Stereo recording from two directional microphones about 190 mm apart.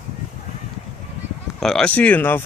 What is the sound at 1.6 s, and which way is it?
Speech, 5° left (ahead or behind).